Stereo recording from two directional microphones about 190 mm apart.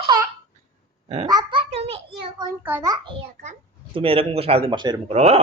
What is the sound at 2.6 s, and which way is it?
Speech, 10° right (ahead or behind).